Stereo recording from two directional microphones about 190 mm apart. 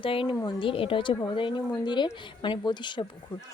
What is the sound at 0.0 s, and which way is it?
A woman's voice, 25° left (ahead or behind).